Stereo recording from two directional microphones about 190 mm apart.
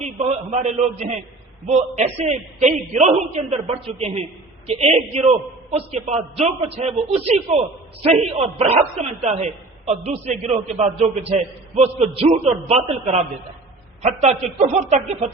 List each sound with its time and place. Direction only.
0.0 s a man's voice: 35° right (ahead or behind)